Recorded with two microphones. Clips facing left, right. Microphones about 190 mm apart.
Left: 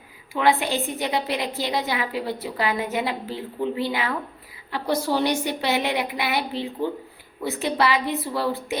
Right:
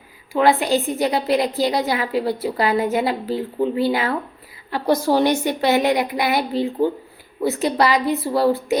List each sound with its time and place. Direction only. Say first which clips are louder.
0.3 s a woman's voice: right 5 dB; 40° right (ahead or behind)